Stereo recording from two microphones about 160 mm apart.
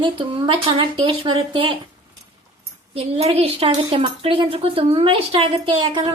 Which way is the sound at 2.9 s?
35° right (ahead or behind).